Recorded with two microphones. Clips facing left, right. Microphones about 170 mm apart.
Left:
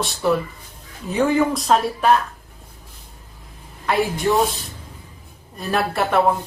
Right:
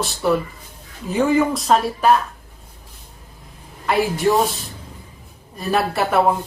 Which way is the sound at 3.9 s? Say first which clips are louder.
Right 2 dB; centre (ahead or behind).